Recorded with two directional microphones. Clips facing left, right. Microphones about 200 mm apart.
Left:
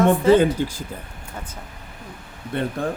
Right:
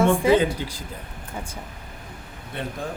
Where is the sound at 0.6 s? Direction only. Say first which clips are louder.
Left 8 dB; 50° left (ahead or behind).